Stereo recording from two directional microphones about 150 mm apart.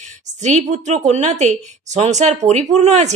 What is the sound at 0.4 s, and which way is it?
A woman's voice, 50° right (ahead or behind).